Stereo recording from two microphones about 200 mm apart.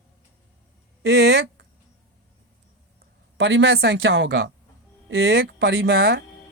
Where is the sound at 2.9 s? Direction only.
60° right (ahead or behind).